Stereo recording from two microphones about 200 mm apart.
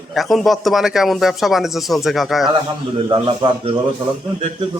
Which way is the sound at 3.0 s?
25° right (ahead or behind).